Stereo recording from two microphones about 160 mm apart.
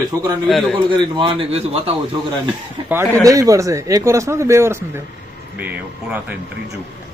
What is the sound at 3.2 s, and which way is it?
A man's voice, 20° right (ahead or behind).